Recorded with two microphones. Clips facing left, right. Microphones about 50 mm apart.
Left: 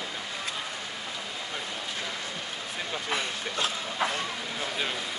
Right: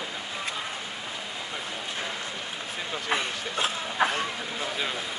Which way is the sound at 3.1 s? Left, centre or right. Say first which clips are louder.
Right 4 dB; right.